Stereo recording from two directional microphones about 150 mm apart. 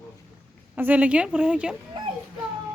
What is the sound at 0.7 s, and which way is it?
Speech, 10° right (ahead or behind).